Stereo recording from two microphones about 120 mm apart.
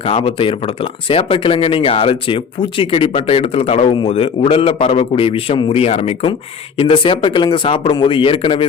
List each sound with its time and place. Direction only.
0.0 s speech: 55° left (ahead or behind)
6.7 s speech: 45° left (ahead or behind)